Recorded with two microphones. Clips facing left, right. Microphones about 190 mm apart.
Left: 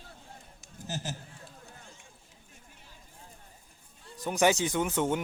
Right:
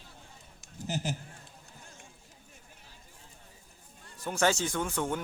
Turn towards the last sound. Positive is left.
turn(degrees=20)  # may be behind; listen again after turning